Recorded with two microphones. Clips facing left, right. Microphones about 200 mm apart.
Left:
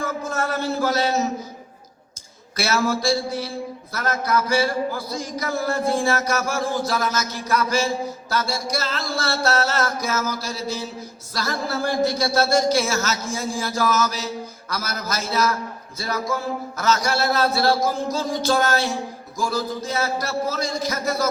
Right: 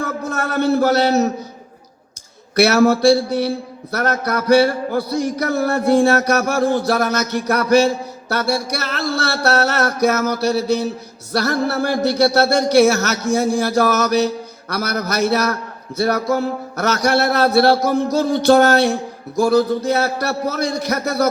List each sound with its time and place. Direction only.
0.0 s a man's voice: 65° right (ahead or behind)
2.6 s speech: 65° right (ahead or behind)